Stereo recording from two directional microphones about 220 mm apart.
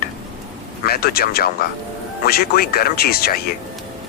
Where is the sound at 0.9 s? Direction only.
45° left (ahead or behind).